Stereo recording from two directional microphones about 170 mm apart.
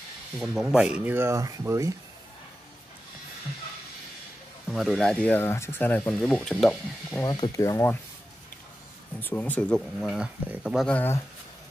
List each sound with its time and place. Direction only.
0.4 s speech: centre (ahead or behind)
4.6 s speech: centre (ahead or behind)
7.3 s speech: 25° left (ahead or behind)
9.2 s speech: 10° left (ahead or behind)
10.9 s speech: 10° left (ahead or behind)